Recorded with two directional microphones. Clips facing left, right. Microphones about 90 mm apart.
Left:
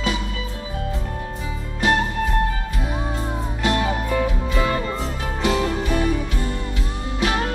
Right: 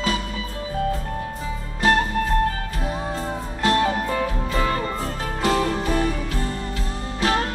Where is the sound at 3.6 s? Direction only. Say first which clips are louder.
Right 2 dB; 35° right (ahead or behind).